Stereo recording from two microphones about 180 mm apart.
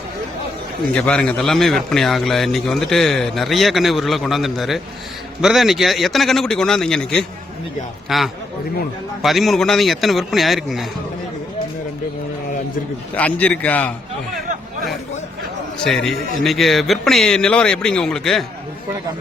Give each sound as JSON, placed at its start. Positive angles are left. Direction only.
{"t": 0.9, "sound": "a man's voice", "side_deg": 5}
{"t": 13.1, "sound": "a man's voice", "side_deg": 10}
{"t": 15.9, "sound": "a man's voice", "side_deg": 5}